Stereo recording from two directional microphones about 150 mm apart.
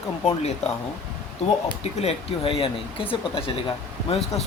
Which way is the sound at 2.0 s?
40° left (ahead or behind).